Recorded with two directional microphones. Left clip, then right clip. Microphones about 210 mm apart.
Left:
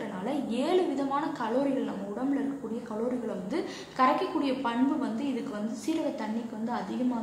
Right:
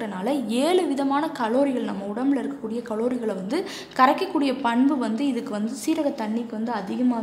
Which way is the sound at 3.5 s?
55° right (ahead or behind).